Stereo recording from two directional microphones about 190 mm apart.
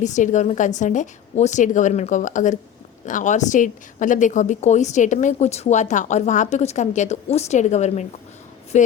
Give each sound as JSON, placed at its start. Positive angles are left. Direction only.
{"t": 0.0, "sound": "a woman's voice", "side_deg": 40}